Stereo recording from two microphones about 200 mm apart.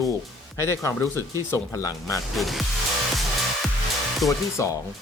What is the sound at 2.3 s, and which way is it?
Speech, centre (ahead or behind).